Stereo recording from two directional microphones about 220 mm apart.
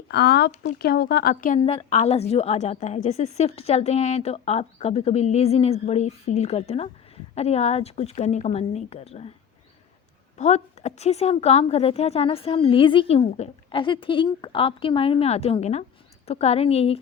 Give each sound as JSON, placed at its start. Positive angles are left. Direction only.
{"t": 0.1, "sound": "a woman's voice", "side_deg": 45}
{"t": 1.5, "sound": "a woman's voice", "side_deg": 25}
{"t": 10.3, "sound": "a woman's voice", "side_deg": 30}